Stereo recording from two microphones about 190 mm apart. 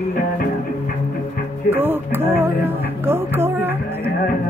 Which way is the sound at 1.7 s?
10° right (ahead or behind).